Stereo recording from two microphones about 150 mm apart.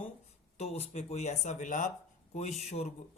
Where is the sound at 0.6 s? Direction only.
45° left (ahead or behind).